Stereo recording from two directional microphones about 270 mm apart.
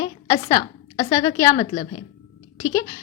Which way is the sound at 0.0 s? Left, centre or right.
Centre.